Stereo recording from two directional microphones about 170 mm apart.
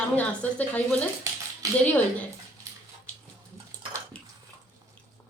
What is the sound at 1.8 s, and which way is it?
Speech, 10° left (ahead or behind).